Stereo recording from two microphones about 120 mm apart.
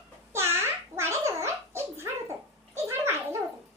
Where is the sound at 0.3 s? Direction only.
20° right (ahead or behind).